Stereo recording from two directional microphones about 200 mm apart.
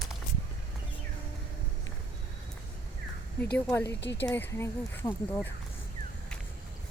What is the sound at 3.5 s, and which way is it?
Speech, 10° left (ahead or behind).